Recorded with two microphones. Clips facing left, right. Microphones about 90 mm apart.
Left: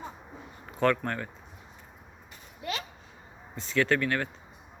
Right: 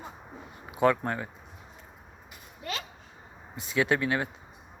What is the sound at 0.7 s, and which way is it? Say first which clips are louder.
Speech: right 2 dB; 10° right (ahead or behind).